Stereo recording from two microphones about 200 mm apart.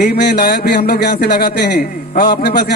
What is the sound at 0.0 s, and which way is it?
A man's voice, 55° left (ahead or behind).